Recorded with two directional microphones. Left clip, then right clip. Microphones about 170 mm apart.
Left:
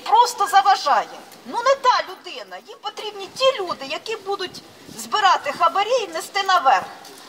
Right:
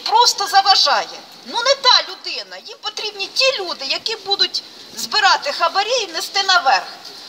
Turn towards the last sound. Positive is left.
turn(degrees=5)  # may be behind; listen again after turning